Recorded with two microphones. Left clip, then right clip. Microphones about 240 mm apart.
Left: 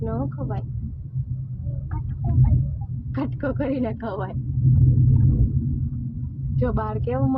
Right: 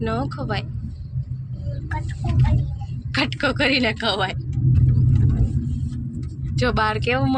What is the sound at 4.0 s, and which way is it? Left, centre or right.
Speech, right.